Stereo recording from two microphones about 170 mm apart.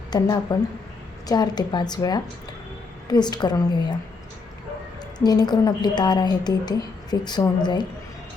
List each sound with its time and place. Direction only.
0.1 s a woman's voice: 25° left (ahead or behind)
5.2 s a woman's voice: 25° left (ahead or behind)